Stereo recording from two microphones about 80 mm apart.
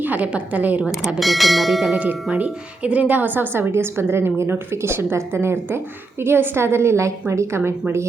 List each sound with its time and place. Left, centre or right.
0.0 s a woman's voice: centre
1.2 s speech: centre
2.2 s a woman's voice: centre; by 7.7 s right